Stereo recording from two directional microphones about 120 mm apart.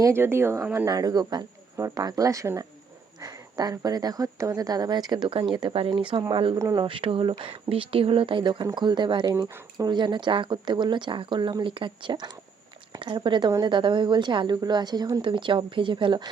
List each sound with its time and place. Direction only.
0.0 s speech: 20° right (ahead or behind); by 9.2 s 40° right (ahead or behind)
9.2 s speech: 30° right (ahead or behind)